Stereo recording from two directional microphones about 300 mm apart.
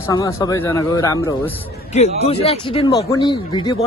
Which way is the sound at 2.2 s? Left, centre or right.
Left.